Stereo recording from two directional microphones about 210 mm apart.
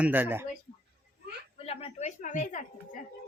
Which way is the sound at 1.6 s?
30° left (ahead or behind).